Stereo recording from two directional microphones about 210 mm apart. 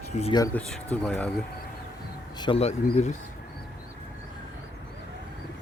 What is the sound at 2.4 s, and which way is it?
Speech, 25° left (ahead or behind).